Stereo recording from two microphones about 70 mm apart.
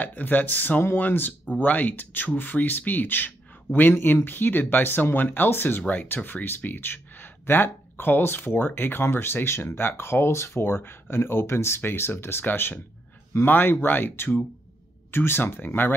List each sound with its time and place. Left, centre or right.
0.0 s speech: left